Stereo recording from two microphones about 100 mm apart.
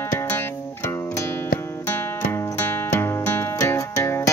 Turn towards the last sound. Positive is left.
turn(degrees=25)  # may be behind; listen again after turning